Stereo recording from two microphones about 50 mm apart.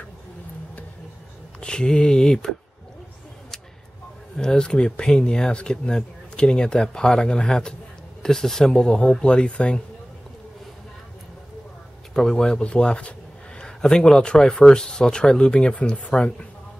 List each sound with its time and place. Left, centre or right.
1.6 s speech: centre
4.4 s speech: centre
9.2 s speech: left
12.1 s speech: centre